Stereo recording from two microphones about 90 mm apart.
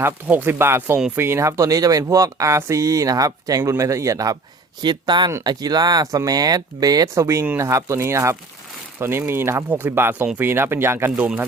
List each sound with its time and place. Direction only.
0.0 s speech: 20° right (ahead or behind); by 4.4 s 40° right (ahead or behind)
4.8 s speech: 55° right (ahead or behind); by 11.3 s 25° right (ahead or behind)